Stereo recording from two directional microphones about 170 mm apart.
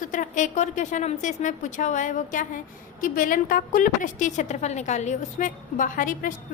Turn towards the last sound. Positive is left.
turn(degrees=50)  # may be behind; listen again after turning